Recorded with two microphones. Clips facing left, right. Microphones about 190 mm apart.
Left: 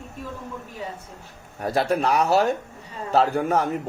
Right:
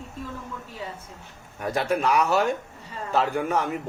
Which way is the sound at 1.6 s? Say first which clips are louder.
Left 2 dB; 35° left (ahead or behind).